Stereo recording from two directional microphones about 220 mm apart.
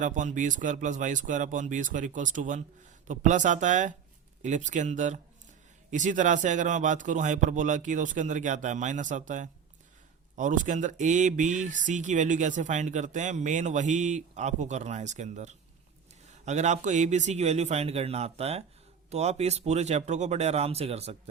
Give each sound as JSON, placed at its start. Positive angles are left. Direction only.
{"t": 0.0, "sound": "speech", "side_deg": -35}